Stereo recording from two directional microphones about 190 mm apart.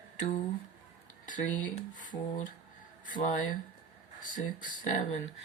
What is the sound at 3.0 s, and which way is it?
Speech, 40° left (ahead or behind).